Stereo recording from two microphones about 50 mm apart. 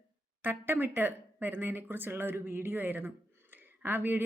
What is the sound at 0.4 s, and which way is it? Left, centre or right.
A woman's voice, right.